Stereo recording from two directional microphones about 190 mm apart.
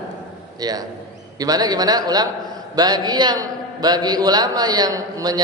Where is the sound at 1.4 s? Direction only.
20° right (ahead or behind).